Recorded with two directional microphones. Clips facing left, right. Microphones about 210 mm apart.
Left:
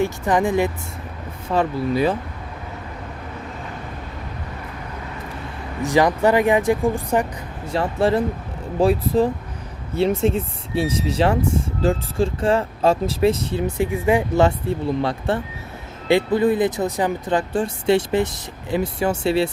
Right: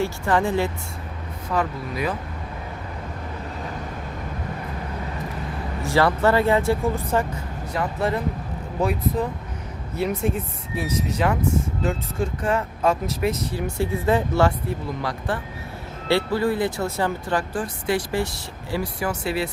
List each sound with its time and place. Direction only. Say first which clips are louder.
0.0 s speech: left 3 dB; 15° left (ahead or behind)
1.5 s speech: left 6 dB; 30° left (ahead or behind)
5.8 s speech: left 3 dB; 15° left (ahead or behind)
7.7 s speech: left 5 dB; 30° left (ahead or behind)